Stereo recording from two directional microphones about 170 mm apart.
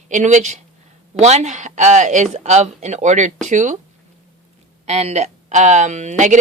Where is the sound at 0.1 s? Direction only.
45° right (ahead or behind).